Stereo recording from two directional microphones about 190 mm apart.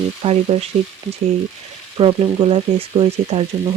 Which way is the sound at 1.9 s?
30° right (ahead or behind).